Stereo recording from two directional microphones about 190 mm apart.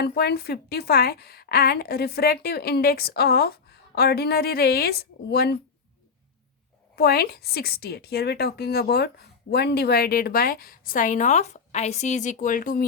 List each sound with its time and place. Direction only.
0.0 s a woman's voice: 60° left (ahead or behind)
6.9 s a woman's voice: 55° left (ahead or behind)